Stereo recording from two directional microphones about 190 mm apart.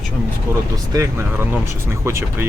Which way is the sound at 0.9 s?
15° right (ahead or behind).